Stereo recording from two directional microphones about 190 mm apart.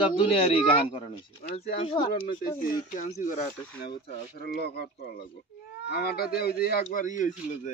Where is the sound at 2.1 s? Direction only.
45° left (ahead or behind).